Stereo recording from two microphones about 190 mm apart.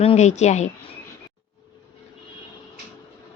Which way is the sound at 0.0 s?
35° left (ahead or behind).